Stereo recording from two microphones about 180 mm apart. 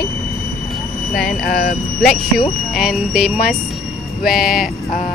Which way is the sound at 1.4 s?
55° left (ahead or behind).